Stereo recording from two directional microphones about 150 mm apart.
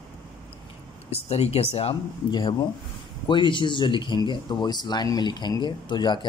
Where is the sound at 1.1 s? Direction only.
45° left (ahead or behind).